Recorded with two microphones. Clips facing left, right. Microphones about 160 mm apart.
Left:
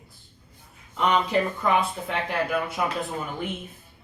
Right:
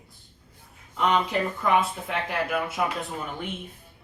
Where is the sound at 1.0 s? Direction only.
Centre (ahead or behind).